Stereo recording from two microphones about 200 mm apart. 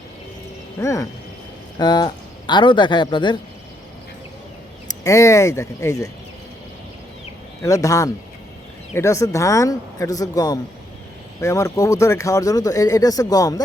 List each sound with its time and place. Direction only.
0.8 s speech: 15° left (ahead or behind)
4.9 s speech: 15° left (ahead or behind)
7.6 s speech: 15° left (ahead or behind)